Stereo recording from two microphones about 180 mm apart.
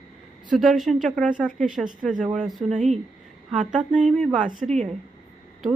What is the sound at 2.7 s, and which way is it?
Speech, 40° right (ahead or behind).